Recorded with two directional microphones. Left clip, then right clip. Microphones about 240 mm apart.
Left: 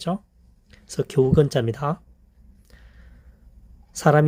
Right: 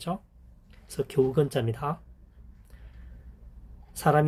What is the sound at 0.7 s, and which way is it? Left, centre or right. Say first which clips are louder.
Speech: left 5 dB; left.